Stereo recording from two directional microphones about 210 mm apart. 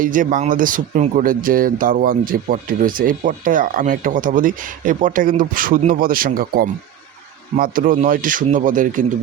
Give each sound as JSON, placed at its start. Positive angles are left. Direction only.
{"t": 0.0, "sound": "speech", "side_deg": -40}